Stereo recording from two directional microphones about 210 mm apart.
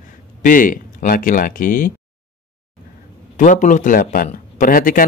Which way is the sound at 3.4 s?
35° left (ahead or behind).